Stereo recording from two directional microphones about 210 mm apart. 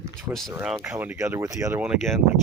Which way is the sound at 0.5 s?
10° right (ahead or behind).